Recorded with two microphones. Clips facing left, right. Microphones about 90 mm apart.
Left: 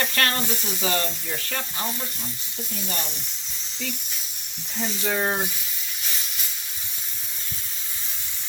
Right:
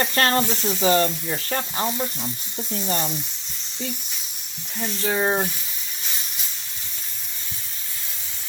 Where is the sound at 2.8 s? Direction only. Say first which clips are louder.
Right 7 dB; 30° right (ahead or behind).